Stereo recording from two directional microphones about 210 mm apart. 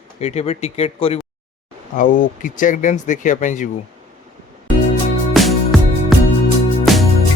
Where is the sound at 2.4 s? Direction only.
40° left (ahead or behind).